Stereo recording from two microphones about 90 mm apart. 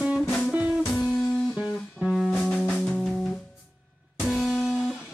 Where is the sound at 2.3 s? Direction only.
15° left (ahead or behind).